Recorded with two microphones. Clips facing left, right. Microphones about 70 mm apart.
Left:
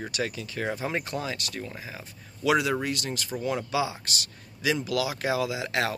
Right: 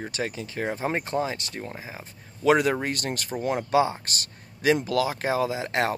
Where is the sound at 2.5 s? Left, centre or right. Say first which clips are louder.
Right 3 dB; right.